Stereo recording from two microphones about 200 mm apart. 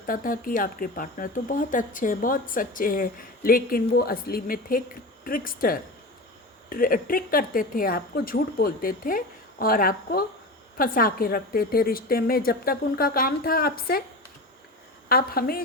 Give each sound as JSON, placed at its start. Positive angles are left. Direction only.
{"t": 0.0, "sound": "speech", "side_deg": 45}
{"t": 15.1, "sound": "speech", "side_deg": 50}